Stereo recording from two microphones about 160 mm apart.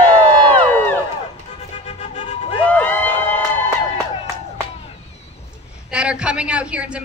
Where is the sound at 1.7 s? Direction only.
40° left (ahead or behind).